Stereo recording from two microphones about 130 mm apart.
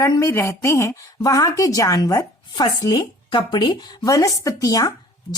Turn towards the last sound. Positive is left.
turn(degrees=25)  # may be behind; listen again after turning